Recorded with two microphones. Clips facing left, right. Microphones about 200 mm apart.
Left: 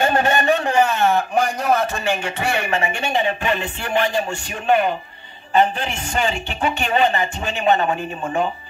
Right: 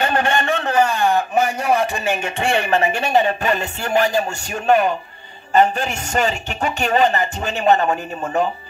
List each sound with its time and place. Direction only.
0.0 s a man's voice: 20° left (ahead or behind); by 7.8 s 40° right (ahead or behind)